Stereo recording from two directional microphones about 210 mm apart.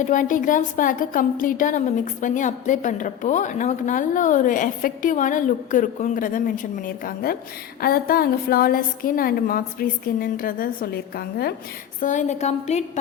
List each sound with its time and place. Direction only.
0.0 s a woman's voice: 40° left (ahead or behind)
11.9 s a woman's voice: 35° left (ahead or behind)